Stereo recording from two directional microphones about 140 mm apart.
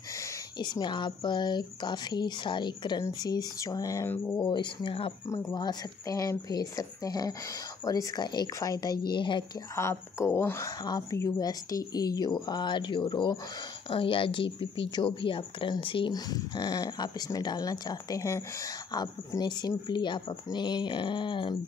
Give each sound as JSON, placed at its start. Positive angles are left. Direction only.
{"t": 0.6, "sound": "speech", "side_deg": 30}
{"t": 4.4, "sound": "speech", "side_deg": 35}
{"t": 9.8, "sound": "speech", "side_deg": 20}